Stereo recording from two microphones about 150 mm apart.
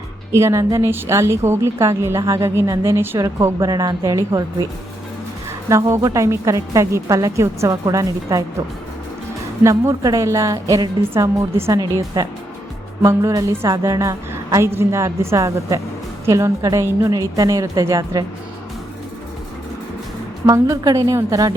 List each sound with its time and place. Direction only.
0.3 s a woman's voice: 20° right (ahead or behind)
5.6 s a woman's voice: 20° right (ahead or behind)
9.6 s a woman's voice: 20° right (ahead or behind)
20.5 s a woman's voice: 25° right (ahead or behind)